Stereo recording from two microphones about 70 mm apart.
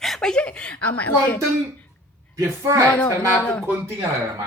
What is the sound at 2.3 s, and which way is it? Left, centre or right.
Speech, right.